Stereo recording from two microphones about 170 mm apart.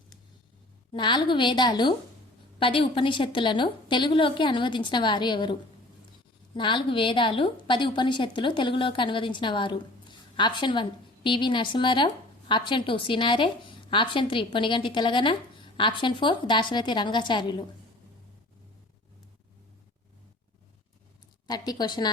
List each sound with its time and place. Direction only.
0.9 s a woman's voice: 25° left (ahead or behind)
21.4 s a woman's voice: 25° left (ahead or behind)